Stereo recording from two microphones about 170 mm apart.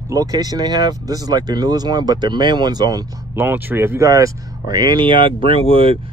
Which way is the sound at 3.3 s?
10° right (ahead or behind).